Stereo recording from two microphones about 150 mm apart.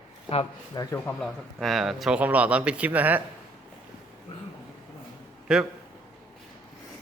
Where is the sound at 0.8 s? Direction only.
20° left (ahead or behind).